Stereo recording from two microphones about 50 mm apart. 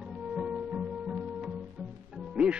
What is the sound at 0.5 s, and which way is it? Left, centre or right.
Music, centre.